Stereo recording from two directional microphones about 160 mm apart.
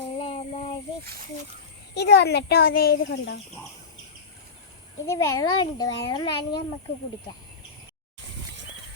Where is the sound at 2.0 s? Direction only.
90° left.